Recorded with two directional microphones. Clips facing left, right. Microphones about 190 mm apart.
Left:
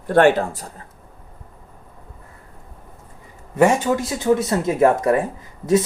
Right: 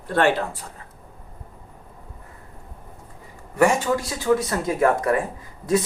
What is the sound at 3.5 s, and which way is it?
Speech, 20° left (ahead or behind).